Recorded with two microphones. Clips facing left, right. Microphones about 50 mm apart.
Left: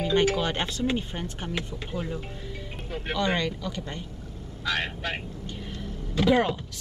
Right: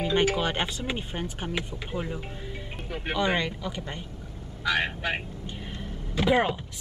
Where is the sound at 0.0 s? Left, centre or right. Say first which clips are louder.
Left 1 dB; centre.